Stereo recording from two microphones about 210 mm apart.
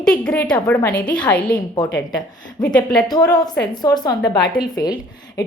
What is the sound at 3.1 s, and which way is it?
A woman's voice, 20° left (ahead or behind).